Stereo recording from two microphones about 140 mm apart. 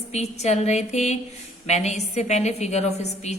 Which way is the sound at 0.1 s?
50° left (ahead or behind).